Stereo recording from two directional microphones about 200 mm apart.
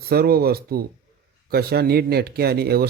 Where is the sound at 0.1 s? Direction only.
50° right (ahead or behind).